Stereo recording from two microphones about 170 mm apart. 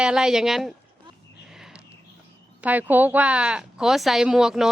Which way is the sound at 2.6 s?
10° right (ahead or behind).